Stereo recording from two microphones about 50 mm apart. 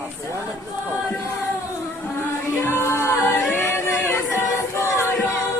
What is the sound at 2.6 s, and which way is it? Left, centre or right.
A capella, left.